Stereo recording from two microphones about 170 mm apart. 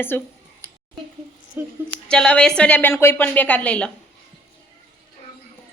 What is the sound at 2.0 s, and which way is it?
A woman's voice, 5° left (ahead or behind).